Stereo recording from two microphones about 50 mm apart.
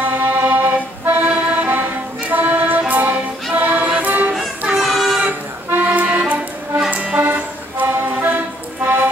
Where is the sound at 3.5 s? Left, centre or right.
Right.